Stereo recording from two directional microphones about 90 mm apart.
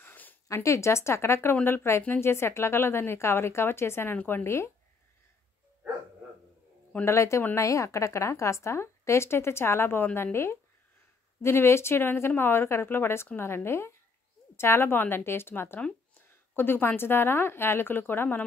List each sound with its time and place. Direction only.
0.0 s a sound: 20° left (ahead or behind)
0.5 s speech: 35° left (ahead or behind)
7.1 s a woman's voice: 30° left (ahead or behind)